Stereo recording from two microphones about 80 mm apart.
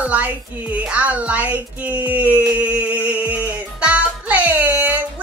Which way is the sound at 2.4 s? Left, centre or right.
Centre.